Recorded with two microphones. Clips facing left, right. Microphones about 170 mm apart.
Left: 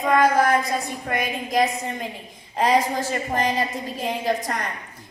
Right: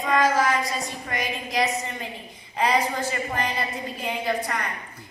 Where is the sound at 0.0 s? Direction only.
60° left (ahead or behind).